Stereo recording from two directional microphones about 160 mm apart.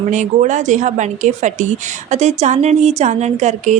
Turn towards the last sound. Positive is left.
turn(degrees=-45)  # may be behind; listen again after turning